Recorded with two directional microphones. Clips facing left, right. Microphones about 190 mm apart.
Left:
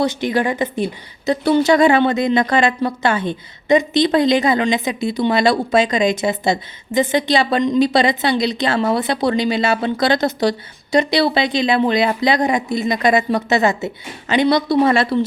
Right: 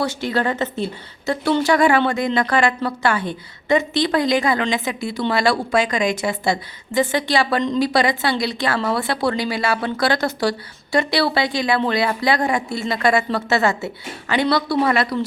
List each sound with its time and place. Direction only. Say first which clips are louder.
0.0 s a woman's voice: left 3 dB; 15° left (ahead or behind)